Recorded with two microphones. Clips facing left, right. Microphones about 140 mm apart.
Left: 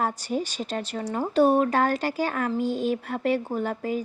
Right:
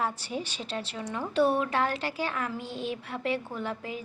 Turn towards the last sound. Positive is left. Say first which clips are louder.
# left 7 dB
turn(degrees=45)  # may be behind; listen again after turning